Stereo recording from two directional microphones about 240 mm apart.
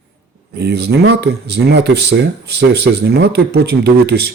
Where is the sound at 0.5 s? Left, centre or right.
Right.